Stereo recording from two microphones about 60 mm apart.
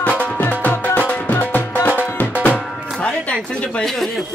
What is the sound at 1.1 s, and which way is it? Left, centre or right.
Music, left.